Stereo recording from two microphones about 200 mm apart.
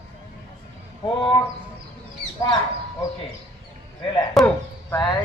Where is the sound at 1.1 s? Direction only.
25° left (ahead or behind).